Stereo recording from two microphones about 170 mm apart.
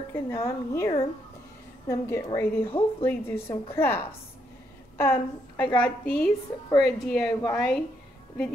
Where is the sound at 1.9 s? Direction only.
20° left (ahead or behind).